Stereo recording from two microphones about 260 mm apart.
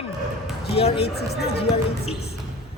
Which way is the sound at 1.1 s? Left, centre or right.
Left.